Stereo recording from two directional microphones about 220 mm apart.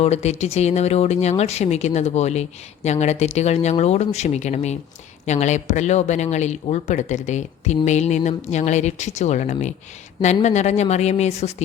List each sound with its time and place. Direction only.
0.0 s speech: 30° left (ahead or behind)